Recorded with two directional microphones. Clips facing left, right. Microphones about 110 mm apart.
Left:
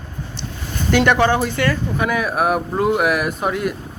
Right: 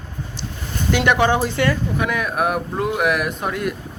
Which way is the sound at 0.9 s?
5° right (ahead or behind).